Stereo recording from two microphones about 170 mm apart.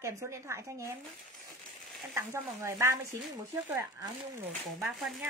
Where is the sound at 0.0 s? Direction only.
15° right (ahead or behind).